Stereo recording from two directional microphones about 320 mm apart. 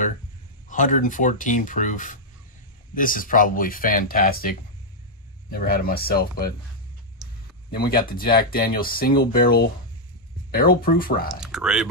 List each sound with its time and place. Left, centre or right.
0.7 s speech: left
7.7 s speech: left
11.2 s speech: centre